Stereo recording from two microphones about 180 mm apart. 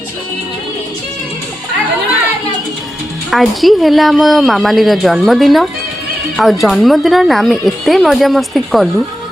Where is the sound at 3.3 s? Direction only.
Centre (ahead or behind).